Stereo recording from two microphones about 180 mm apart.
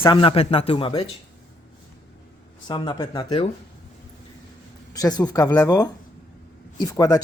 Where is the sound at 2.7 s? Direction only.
25° left (ahead or behind).